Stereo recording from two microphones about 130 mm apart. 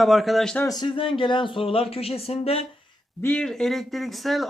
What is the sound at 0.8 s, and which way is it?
Speech, 40° left (ahead or behind).